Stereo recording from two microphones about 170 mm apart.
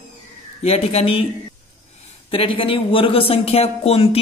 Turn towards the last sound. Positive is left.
turn(degrees=35)  # may be behind; listen again after turning